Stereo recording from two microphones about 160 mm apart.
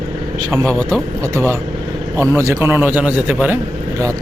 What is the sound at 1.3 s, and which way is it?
A man's voice, 15° right (ahead or behind).